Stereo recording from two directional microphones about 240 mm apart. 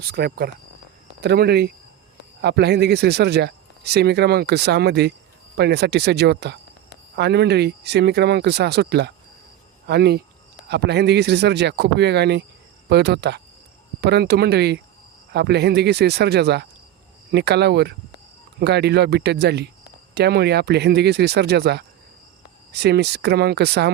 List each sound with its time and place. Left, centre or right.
0.0 s speech: right